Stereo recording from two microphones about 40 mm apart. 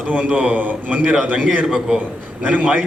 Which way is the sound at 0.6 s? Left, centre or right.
Right.